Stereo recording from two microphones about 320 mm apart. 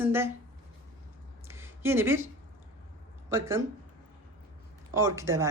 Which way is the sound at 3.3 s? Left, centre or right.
Centre.